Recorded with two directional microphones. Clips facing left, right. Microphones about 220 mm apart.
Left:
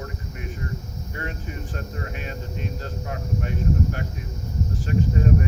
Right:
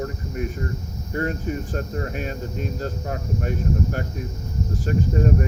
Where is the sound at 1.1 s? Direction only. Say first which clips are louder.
Right 9 dB; 40° right (ahead or behind).